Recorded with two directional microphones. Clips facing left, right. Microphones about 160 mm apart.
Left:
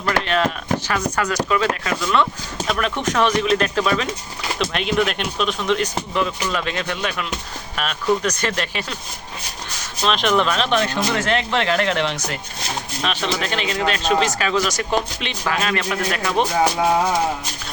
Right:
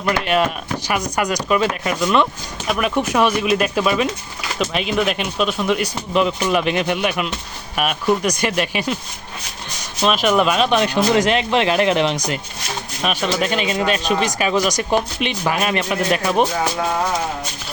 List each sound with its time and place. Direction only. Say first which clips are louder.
0.0 s speech: right 2 dB; 15° right (ahead or behind)
10.0 s speech: right 2 dB; 10° right (ahead or behind)